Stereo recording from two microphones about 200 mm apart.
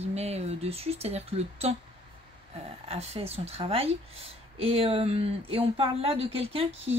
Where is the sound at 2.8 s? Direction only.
30° right (ahead or behind).